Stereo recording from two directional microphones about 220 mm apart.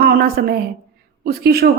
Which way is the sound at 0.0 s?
45° right (ahead or behind).